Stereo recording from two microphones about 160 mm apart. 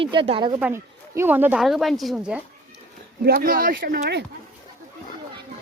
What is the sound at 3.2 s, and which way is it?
Speech, 75° right (ahead or behind).